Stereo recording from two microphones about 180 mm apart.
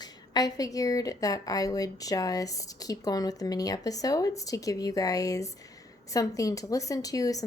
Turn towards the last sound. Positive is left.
turn(degrees=20)  # may be behind; listen again after turning